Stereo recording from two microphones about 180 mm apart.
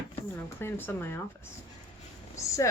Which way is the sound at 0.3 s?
10° left (ahead or behind).